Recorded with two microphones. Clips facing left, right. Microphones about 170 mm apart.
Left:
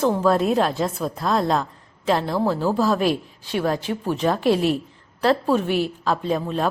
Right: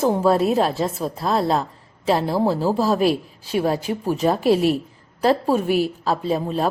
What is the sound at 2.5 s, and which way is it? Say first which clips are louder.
Speech: right 1 dB; 35° right (ahead or behind).